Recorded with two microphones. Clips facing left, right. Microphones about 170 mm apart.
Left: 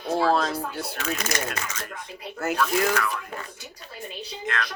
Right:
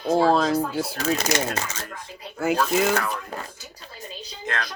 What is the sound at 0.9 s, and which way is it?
Speech, 35° right (ahead or behind).